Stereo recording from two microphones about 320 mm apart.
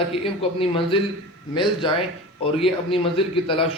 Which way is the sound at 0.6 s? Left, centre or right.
Centre.